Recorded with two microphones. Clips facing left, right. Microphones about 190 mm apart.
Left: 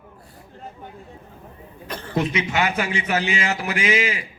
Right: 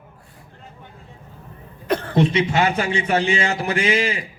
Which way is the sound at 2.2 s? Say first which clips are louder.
Right 3 dB; 30° right (ahead or behind).